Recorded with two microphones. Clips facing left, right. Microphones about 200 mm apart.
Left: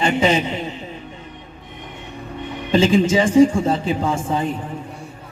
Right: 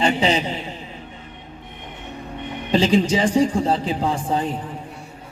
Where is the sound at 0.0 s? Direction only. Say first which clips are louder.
Left 2 dB; 35° right (ahead or behind).